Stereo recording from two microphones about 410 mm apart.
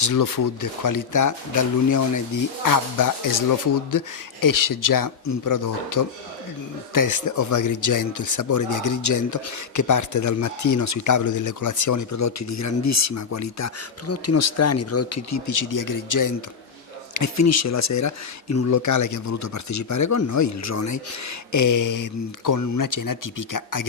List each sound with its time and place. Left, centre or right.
0.0 s speech: left